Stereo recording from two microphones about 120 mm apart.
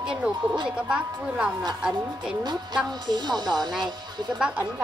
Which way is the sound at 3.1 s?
35° right (ahead or behind).